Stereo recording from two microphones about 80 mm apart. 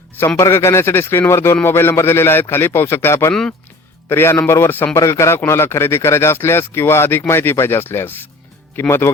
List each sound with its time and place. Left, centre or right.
0.3 s a man's voice: left